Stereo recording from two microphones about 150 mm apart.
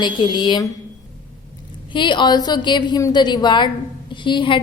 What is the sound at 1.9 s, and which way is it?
A woman's voice, 30° left (ahead or behind).